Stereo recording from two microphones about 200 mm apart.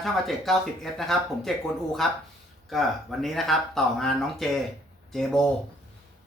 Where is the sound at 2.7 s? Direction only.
Centre (ahead or behind).